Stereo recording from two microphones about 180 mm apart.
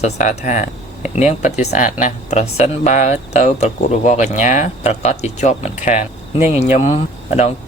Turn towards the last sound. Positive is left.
turn(degrees=40)  # may be behind; listen again after turning